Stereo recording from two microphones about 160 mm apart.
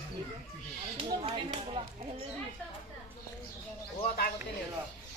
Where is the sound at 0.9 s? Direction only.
35° right (ahead or behind).